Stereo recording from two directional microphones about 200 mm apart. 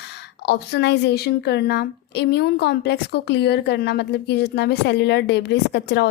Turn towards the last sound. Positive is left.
turn(degrees=55)  # may be behind; listen again after turning